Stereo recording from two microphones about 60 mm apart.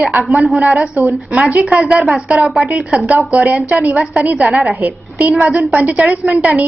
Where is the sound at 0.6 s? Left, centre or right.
Right.